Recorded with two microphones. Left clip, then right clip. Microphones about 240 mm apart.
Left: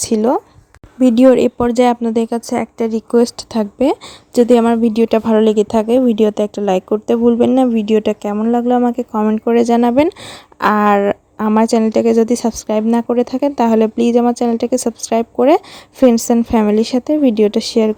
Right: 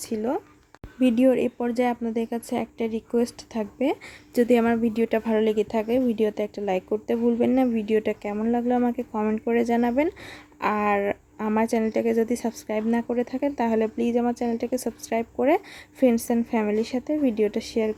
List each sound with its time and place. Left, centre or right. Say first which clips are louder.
0.0 s speech: left 13 dB; left